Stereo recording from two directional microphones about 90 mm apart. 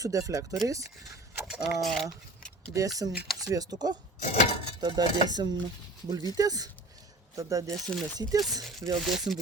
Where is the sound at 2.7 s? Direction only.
40° right (ahead or behind).